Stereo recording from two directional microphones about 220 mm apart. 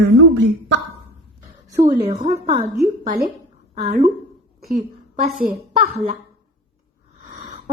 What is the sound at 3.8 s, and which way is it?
Speech, 30° right (ahead or behind).